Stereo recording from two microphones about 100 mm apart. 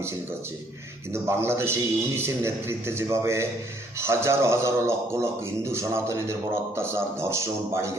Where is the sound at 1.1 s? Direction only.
25° right (ahead or behind).